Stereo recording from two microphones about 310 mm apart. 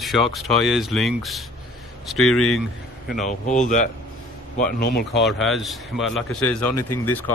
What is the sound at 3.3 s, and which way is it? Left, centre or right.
A man's voice, left.